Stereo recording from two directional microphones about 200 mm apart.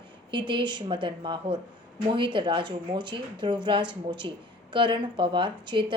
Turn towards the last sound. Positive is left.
turn(degrees=-25)  # may be behind; listen again after turning